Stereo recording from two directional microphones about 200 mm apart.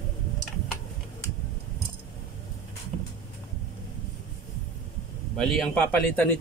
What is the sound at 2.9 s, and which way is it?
Vehicle, 35° right (ahead or behind).